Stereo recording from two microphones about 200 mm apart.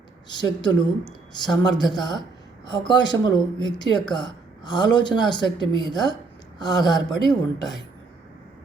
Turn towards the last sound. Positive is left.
turn(degrees=20)  # may be behind; listen again after turning